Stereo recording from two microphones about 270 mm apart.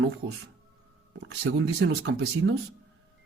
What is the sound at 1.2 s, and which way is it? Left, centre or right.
Speech, right.